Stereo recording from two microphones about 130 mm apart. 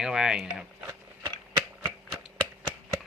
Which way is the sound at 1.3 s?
40° right (ahead or behind).